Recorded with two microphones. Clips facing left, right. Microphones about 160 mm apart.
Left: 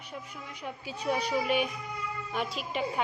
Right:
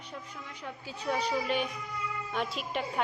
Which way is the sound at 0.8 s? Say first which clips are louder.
Left 1 dB; 15° left (ahead or behind).